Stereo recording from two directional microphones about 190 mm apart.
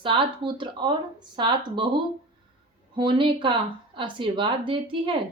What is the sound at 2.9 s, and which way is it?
Speech, 25° right (ahead or behind).